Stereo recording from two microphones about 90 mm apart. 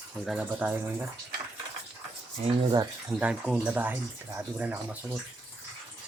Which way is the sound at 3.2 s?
15° right (ahead or behind).